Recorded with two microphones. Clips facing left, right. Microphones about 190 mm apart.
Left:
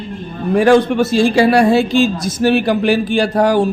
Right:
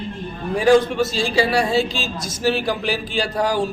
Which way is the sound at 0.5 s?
65° left (ahead or behind).